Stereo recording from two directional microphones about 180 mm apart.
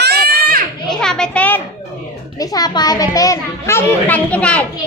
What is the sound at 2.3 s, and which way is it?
A child's voice, 20° left (ahead or behind).